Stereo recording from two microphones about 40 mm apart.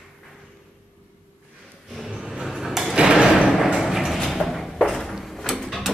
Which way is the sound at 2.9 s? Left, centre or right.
Centre.